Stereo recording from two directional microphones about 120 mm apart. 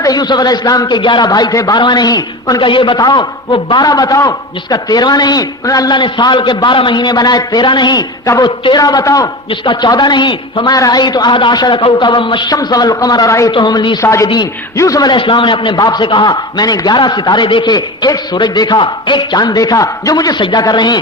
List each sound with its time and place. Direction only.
0.0 s a man's voice: 35° left (ahead or behind)
14.0 s a man's voice: 25° left (ahead or behind)
15.1 s a man's voice: 45° left (ahead or behind)